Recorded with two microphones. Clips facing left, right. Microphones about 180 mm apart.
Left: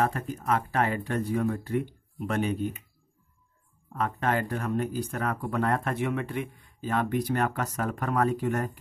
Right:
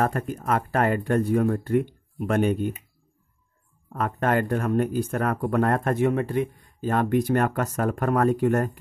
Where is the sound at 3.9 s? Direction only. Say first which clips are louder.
Right 4 dB; 50° right (ahead or behind).